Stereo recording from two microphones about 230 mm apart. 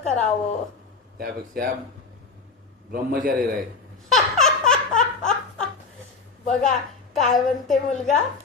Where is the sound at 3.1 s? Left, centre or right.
Right.